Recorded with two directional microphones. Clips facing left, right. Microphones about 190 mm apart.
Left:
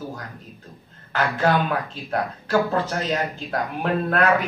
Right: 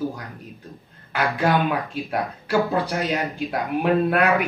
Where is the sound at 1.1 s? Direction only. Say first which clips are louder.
Even; 15° right (ahead or behind).